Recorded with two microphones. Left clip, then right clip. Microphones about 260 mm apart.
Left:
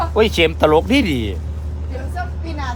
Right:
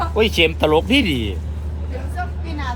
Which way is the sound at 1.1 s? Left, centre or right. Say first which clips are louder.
Left 1 dB; left.